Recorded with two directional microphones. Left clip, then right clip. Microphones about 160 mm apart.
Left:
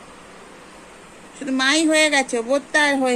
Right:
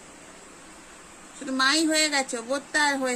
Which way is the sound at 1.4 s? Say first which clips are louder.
Left 4 dB; 15° left (ahead or behind).